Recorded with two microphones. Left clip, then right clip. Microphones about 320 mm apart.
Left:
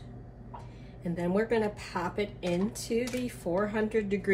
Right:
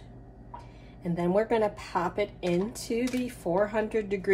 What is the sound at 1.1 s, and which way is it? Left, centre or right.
Speech, right.